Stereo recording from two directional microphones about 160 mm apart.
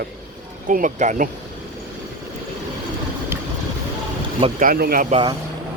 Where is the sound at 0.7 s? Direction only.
55° right (ahead or behind).